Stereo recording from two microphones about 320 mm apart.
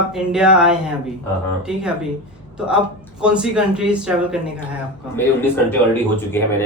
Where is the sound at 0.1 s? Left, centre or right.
Centre.